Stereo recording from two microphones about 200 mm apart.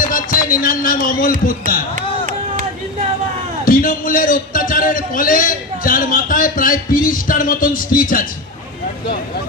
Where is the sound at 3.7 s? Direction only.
45° left (ahead or behind).